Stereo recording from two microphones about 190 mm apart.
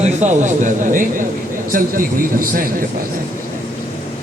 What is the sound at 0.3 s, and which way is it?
A man's voice, 40° right (ahead or behind).